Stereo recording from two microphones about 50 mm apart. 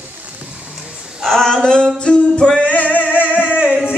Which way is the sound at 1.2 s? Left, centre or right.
Centre.